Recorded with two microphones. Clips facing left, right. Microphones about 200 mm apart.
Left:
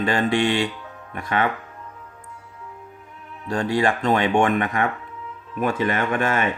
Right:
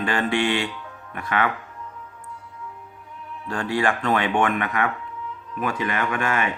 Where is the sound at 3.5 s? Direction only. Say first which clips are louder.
Left 2 dB; 25° left (ahead or behind).